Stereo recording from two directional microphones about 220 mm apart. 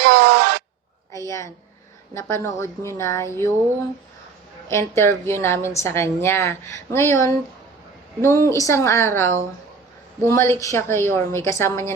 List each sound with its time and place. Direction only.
0.0 s a sound: 45° right (ahead or behind)
2.1 s a woman's voice: 10° left (ahead or behind)
4.7 s a woman's voice: 10° left (ahead or behind)